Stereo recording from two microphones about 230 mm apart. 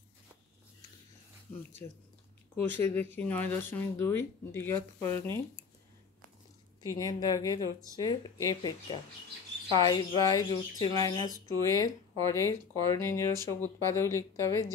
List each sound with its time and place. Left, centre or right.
2.5 s speech: centre
6.8 s speech: centre